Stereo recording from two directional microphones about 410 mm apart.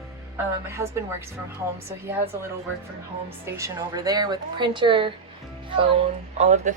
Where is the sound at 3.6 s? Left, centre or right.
Centre.